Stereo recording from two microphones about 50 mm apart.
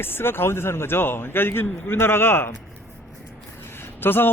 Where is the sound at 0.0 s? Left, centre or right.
Left.